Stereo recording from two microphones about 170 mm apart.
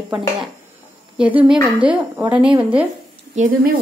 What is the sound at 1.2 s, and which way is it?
Speech, 10° right (ahead or behind).